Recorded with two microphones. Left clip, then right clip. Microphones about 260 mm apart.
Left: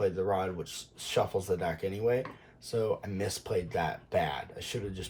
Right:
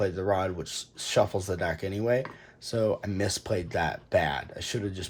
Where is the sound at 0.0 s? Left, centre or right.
Right.